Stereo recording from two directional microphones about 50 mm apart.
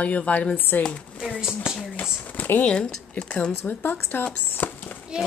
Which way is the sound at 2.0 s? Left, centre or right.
Left.